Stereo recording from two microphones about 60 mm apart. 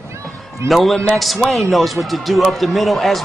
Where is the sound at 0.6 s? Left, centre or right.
Centre.